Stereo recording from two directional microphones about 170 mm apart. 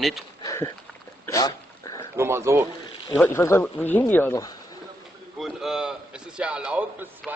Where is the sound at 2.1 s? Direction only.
15° right (ahead or behind).